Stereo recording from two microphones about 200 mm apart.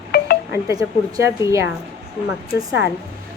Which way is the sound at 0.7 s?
15° right (ahead or behind).